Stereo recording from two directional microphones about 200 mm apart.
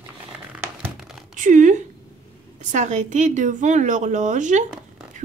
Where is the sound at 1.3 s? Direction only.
40° right (ahead or behind).